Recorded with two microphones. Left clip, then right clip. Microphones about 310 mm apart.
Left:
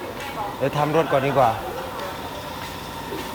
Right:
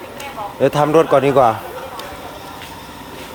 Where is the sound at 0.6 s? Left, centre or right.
Centre.